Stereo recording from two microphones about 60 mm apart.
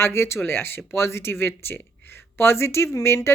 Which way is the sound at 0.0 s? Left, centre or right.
Left.